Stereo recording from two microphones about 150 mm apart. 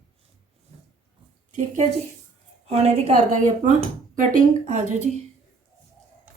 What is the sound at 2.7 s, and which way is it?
A woman's voice, 45° right (ahead or behind).